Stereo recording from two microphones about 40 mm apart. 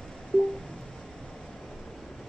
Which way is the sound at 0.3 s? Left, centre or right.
Centre.